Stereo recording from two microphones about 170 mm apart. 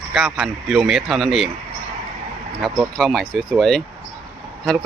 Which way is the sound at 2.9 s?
Centre (ahead or behind).